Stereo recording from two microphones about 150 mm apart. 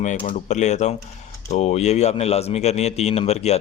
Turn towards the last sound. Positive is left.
turn(degrees=45)  # may be behind; listen again after turning